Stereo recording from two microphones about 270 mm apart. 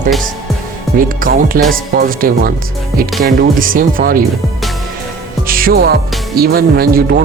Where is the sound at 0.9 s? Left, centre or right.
Right.